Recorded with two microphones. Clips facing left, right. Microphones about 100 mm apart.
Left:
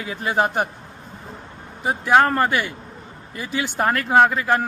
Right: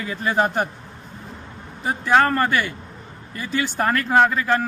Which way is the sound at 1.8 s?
15° left (ahead or behind).